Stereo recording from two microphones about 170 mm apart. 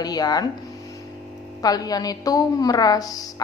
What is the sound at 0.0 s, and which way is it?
Speech, 25° left (ahead or behind).